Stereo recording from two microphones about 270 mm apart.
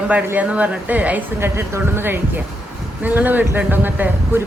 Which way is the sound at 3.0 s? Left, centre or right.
Centre.